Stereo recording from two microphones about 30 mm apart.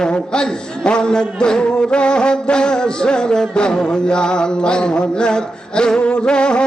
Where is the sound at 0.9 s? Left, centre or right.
Left.